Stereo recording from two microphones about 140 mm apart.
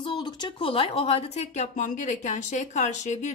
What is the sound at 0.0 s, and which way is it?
Speech, 35° left (ahead or behind).